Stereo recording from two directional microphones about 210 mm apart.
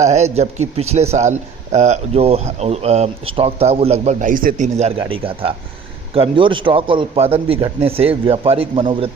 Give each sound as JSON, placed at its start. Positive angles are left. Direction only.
{"t": 0.0, "sound": "a man's voice", "side_deg": -30}